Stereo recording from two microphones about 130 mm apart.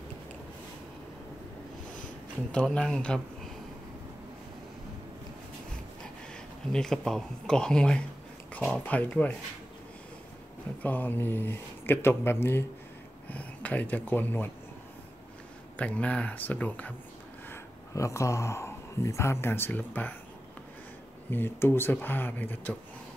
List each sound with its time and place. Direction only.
2.5 s speech: 5° left (ahead or behind)
6.7 s speech: 5° left (ahead or behind)
10.8 s speech: 15° left (ahead or behind)
15.7 s speech: 10° left (ahead or behind)
17.5 s speech: 25° left (ahead or behind)
21.3 s speech: 15° left (ahead or behind)